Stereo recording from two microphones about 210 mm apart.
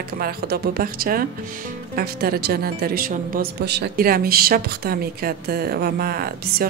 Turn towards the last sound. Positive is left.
turn(degrees=-45)  # may be behind; listen again after turning